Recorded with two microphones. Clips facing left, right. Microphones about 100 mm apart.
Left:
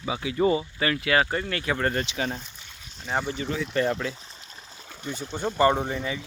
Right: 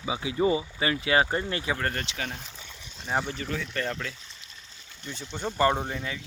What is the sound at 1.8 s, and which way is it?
Speech, 15° left (ahead or behind).